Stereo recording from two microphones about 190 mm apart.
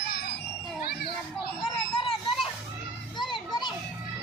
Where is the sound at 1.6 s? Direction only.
30° left (ahead or behind).